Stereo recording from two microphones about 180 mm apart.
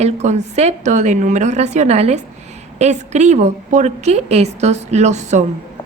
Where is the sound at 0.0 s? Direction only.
40° right (ahead or behind).